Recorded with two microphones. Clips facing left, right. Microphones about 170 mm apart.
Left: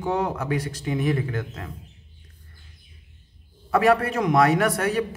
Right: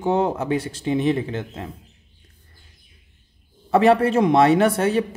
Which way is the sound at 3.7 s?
25° right (ahead or behind).